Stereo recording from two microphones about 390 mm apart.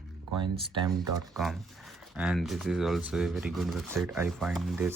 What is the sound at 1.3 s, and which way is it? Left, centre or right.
Speech, centre.